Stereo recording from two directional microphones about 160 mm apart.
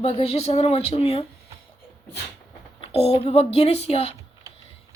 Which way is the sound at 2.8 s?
35° left (ahead or behind).